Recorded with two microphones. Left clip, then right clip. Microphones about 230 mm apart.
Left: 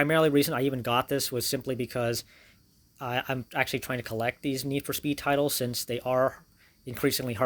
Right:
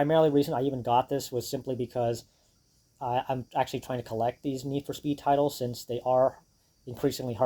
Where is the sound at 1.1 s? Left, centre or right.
Left.